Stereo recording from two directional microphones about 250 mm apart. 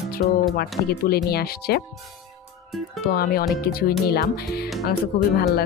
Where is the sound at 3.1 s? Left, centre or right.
Left.